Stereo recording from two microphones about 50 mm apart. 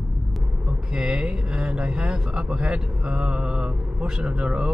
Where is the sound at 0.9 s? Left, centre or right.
Centre.